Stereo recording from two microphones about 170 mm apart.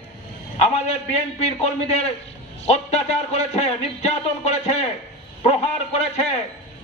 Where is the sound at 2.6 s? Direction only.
40° left (ahead or behind).